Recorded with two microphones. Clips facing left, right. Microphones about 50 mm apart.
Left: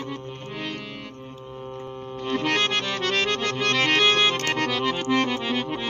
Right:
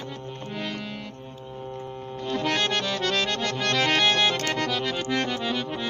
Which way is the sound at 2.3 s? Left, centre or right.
Left.